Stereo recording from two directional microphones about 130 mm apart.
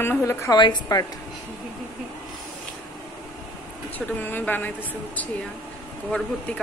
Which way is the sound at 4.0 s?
15° left (ahead or behind).